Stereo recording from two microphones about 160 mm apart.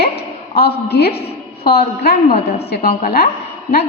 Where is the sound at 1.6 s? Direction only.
80° left.